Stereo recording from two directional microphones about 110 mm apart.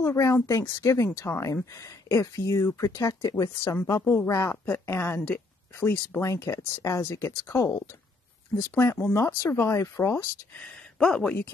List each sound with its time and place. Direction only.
0.0 s a woman's voice: 30° left (ahead or behind)
4.0 s a woman's voice: 15° left (ahead or behind)
6.2 s a woman's voice: 25° left (ahead or behind)
8.7 s a woman's voice: 15° left (ahead or behind)
10.6 s speech: 5° left (ahead or behind)